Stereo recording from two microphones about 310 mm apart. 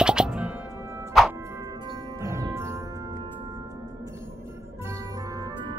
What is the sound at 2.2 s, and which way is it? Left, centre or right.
Music, centre.